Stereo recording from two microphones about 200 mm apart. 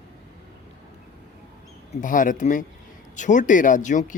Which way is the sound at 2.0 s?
40° left (ahead or behind).